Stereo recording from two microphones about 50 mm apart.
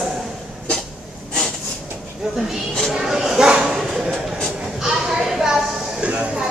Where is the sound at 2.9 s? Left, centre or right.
Centre.